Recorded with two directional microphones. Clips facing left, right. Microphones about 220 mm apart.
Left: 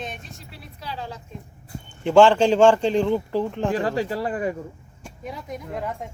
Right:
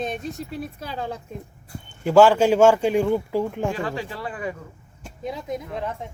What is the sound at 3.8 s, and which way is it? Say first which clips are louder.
Speech: left 5 dB; 40° left (ahead or behind).